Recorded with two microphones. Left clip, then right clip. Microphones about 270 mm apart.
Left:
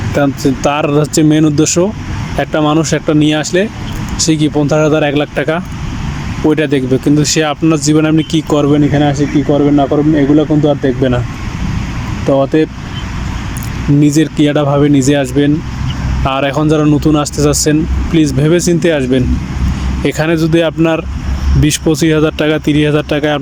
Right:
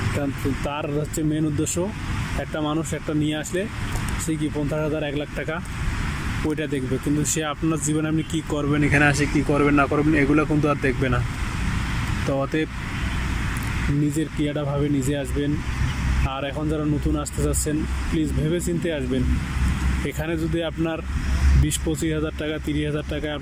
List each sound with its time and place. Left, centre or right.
0.2 s speech: left
12.3 s speech: left
14.2 s speech: left